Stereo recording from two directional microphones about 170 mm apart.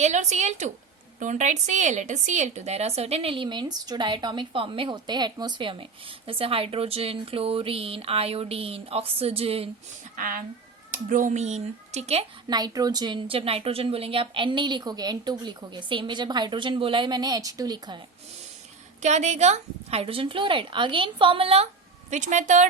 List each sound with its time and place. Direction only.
0.0 s a woman's voice: 45° right (ahead or behind)
10.2 s speech: 55° right (ahead or behind)
12.5 s a woman's voice: 25° right (ahead or behind)
19.0 s a woman's voice: 40° right (ahead or behind)
22.1 s speech: 45° right (ahead or behind)